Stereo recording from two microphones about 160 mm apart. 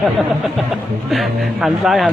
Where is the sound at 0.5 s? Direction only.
Centre (ahead or behind).